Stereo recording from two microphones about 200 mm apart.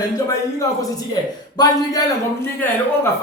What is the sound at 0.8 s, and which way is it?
A man's voice, 20° left (ahead or behind).